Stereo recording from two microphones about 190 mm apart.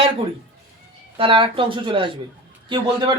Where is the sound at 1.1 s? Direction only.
25° right (ahead or behind).